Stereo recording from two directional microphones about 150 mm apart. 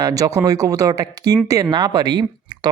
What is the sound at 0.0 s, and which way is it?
Speech, 25° right (ahead or behind).